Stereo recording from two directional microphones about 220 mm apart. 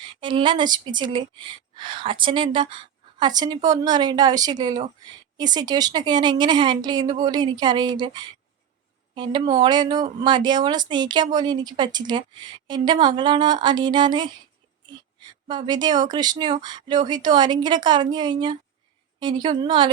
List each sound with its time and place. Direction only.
0.0 s a woman's voice: 20° right (ahead or behind)
15.4 s a woman's voice: 20° right (ahead or behind)